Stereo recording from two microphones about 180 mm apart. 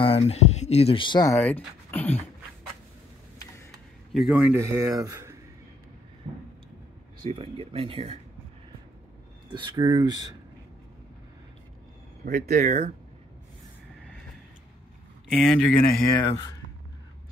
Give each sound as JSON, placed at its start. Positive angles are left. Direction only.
{"t": 0.0, "sound": "speech", "side_deg": 35}
{"t": 1.4, "sound": "speech", "side_deg": 10}
{"t": 4.1, "sound": "a man's voice", "side_deg": 0}
{"t": 4.5, "sound": "speech", "side_deg": -15}
{"t": 7.2, "sound": "speech", "side_deg": -35}
{"t": 9.5, "sound": "speech", "side_deg": -25}
{"t": 12.3, "sound": "speech", "side_deg": -45}
{"t": 15.2, "sound": "speech", "side_deg": 0}